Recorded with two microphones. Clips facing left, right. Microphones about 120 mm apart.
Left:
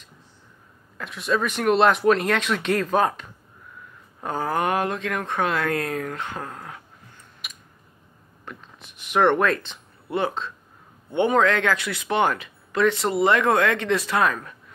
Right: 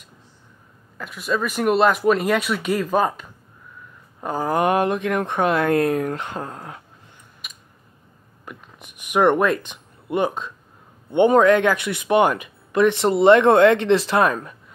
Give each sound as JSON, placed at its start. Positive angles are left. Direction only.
{"t": 0.9, "sound": "speech", "side_deg": -5}
{"t": 7.4, "sound": "a sound", "side_deg": 0}
{"t": 8.5, "sound": "speech", "side_deg": -15}